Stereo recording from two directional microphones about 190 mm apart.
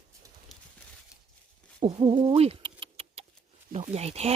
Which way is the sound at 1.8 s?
25° right (ahead or behind).